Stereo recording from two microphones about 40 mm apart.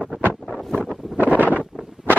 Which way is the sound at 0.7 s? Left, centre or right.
Centre.